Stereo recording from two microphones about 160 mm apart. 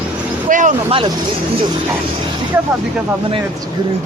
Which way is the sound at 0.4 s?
55° right (ahead or behind).